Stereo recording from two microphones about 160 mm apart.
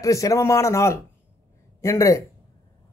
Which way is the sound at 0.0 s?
20° left (ahead or behind).